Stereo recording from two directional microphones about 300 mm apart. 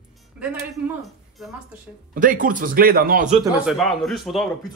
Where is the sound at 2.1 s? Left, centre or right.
Right.